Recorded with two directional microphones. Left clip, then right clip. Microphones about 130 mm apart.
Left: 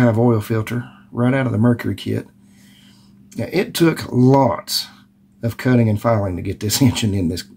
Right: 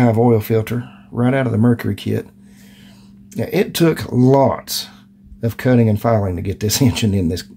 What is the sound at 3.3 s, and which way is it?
Speech, 25° right (ahead or behind).